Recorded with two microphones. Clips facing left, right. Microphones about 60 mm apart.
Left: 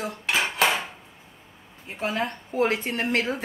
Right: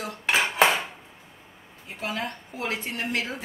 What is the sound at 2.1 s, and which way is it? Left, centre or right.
A woman's voice, left.